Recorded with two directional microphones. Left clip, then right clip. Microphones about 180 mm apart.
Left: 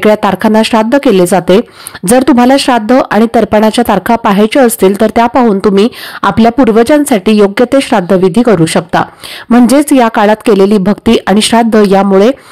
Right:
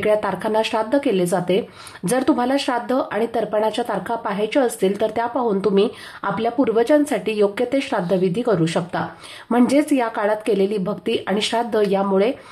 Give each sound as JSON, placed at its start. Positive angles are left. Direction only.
{"t": 0.0, "sound": "speech", "side_deg": 50}